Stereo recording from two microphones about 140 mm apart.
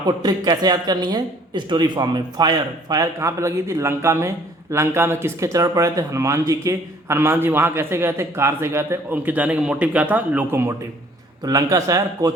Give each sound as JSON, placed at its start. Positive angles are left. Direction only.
{"t": 0.0, "sound": "speech", "side_deg": -30}